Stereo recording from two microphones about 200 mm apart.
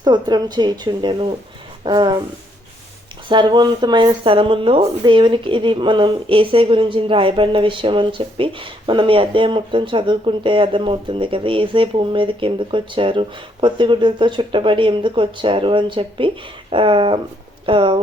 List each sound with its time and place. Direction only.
0.0 s speech: 20° right (ahead or behind)
3.2 s speech: 25° right (ahead or behind)